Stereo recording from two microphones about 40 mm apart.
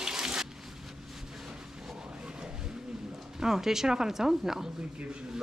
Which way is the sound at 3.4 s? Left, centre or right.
Centre.